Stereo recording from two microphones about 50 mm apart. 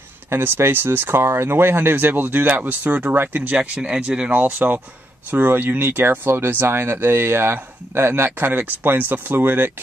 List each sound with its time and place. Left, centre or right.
0.3 s speech: right
8.4 s speech: right